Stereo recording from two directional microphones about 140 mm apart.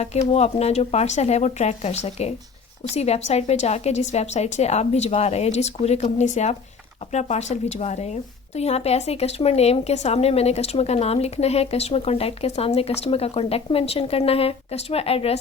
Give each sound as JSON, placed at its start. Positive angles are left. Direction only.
{"t": 0.0, "sound": "a woman's voice", "side_deg": 50}